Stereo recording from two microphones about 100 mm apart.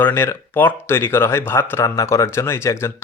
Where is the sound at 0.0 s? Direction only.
25° left (ahead or behind).